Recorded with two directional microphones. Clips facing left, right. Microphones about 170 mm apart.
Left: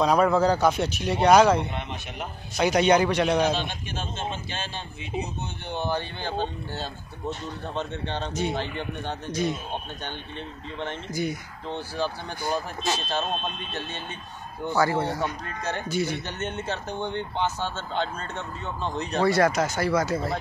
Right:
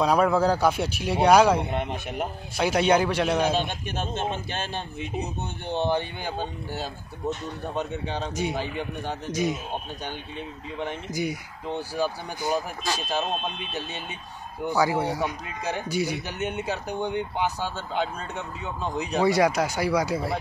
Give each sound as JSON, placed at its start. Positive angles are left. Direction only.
{"t": 0.0, "sound": "speech", "side_deg": -5}
{"t": 1.7, "sound": "speech", "side_deg": -50}
{"t": 2.5, "sound": "a man's voice", "side_deg": -5}
{"t": 3.5, "sound": "speech", "side_deg": -50}
{"t": 5.7, "sound": "speech", "side_deg": -25}
{"t": 11.1, "sound": "speech", "side_deg": -10}